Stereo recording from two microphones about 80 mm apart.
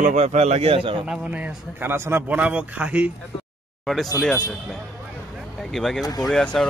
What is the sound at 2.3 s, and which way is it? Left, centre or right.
Speech, centre.